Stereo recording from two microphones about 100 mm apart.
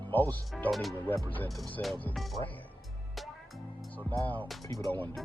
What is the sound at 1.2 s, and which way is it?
Speech, 15° left (ahead or behind).